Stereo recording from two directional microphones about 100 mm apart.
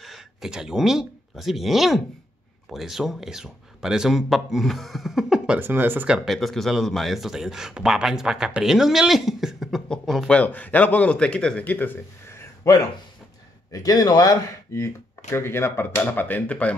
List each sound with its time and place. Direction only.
0.0 s speech: 5° right (ahead or behind)
5.6 s speech: 20° right (ahead or behind); by 10.3 s 5° left (ahead or behind)
10.3 s speech: 15° left (ahead or behind)